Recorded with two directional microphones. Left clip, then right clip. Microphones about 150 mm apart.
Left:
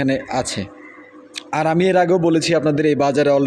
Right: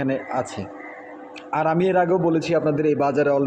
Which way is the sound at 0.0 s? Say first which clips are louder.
Left 4 dB; 55° left (ahead or behind).